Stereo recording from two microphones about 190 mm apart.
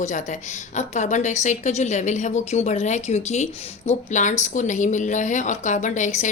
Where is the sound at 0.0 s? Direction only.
40° left (ahead or behind).